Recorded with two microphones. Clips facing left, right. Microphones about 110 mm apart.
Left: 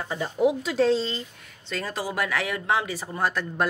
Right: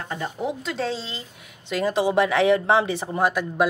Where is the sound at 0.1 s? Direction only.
10° left (ahead or behind).